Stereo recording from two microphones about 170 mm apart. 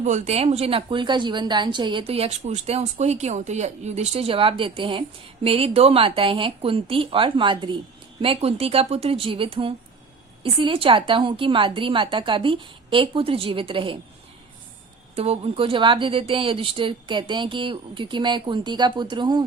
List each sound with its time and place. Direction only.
0.0 s a woman's voice: 40° right (ahead or behind)
15.1 s a woman's voice: 35° right (ahead or behind)